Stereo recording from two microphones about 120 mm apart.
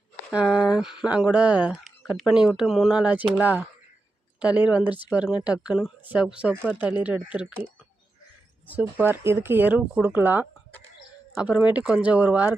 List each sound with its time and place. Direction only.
0.3 s speech: 5° right (ahead or behind)
3.0 s speech: 10° right (ahead or behind)
8.6 s speech: 15° right (ahead or behind)